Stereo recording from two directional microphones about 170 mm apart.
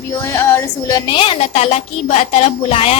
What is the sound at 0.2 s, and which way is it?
A woman's voice, 15° left (ahead or behind).